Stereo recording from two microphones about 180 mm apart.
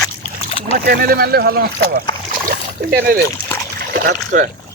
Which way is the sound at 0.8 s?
55° right (ahead or behind).